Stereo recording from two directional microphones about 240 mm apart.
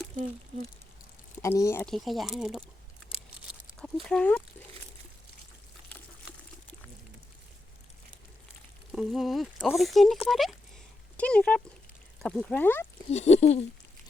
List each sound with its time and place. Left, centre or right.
1.4 s speech: centre
4.1 s speech: centre
8.9 s speech: centre
13.1 s speech: left